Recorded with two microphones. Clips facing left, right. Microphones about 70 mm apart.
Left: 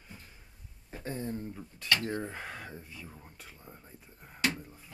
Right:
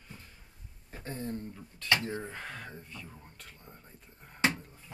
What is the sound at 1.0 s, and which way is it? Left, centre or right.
Speech, centre.